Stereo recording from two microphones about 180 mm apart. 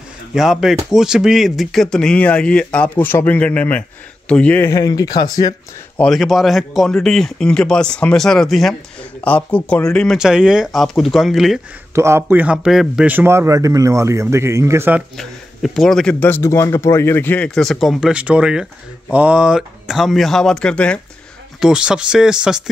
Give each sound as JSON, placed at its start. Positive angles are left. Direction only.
{"t": 0.3, "sound": "speech", "side_deg": -5}
{"t": 5.9, "sound": "speech", "side_deg": 0}
{"t": 11.9, "sound": "a man's voice", "side_deg": -15}
{"t": 15.1, "sound": "speech", "side_deg": 0}